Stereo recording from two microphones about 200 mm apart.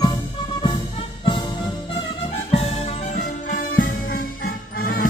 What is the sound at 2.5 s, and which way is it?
Music, 30° left (ahead or behind).